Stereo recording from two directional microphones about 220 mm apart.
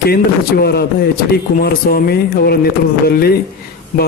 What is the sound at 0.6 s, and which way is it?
Speech, 45° left (ahead or behind).